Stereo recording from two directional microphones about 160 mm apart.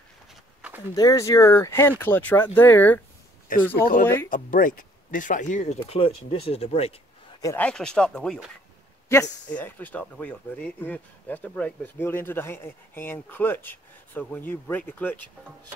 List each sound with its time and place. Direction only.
0.6 s a sound: 10° right (ahead or behind)
0.9 s speech: 20° left (ahead or behind)
4.0 s speech: 15° left (ahead or behind)
4.3 s speech: 60° left (ahead or behind); by 7.0 s 40° left (ahead or behind)
7.4 s speech: 10° left (ahead or behind)